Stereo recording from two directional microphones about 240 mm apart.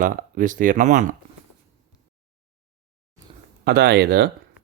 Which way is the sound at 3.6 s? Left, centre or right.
Right.